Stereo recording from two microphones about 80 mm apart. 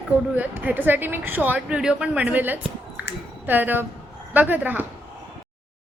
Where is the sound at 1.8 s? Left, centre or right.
Centre.